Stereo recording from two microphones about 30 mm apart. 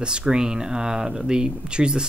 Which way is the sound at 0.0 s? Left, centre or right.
Right.